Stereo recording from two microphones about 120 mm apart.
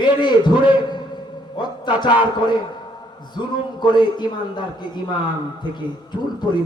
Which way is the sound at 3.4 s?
40° left (ahead or behind).